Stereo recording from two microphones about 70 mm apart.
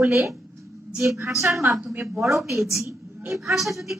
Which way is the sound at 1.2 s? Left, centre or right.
Right.